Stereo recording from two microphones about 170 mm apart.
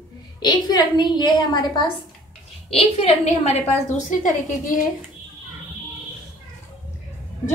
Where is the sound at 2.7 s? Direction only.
40° left (ahead or behind).